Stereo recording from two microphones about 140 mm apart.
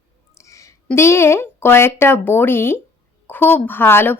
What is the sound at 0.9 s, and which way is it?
Speech, 20° left (ahead or behind).